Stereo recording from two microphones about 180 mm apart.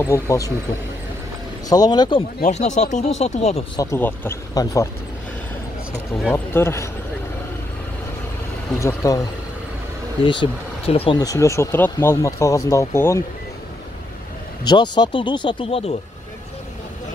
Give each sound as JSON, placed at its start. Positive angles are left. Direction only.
{"t": 0.0, "sound": "speech", "side_deg": 15}
{"t": 1.7, "sound": "speech", "side_deg": 20}
{"t": 2.4, "sound": "speech", "side_deg": 40}
{"t": 3.7, "sound": "speech", "side_deg": 15}
{"t": 6.2, "sound": "speech", "side_deg": 10}
{"t": 8.7, "sound": "speech", "side_deg": 15}
{"t": 10.2, "sound": "speech", "side_deg": 25}
{"t": 11.1, "sound": "speech", "side_deg": 20}
{"t": 14.6, "sound": "speech", "side_deg": 25}